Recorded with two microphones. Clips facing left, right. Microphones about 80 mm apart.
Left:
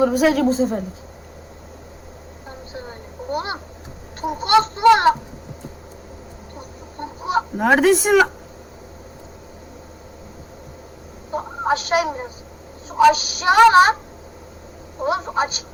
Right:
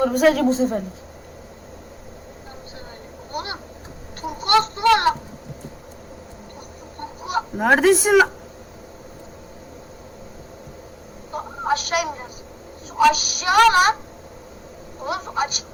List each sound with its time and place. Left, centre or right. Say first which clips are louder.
0.0 s a woman's voice: even; centre
3.3 s a sound: left 3 dB; left
7.0 s chicken: left 4 dB; left
7.5 s a woman's voice: even; centre
11.3 s a sound: left 2 dB; left
13.0 s a woman's voice: left 3 dB; left
15.0 s a woman's voice: left 4 dB; left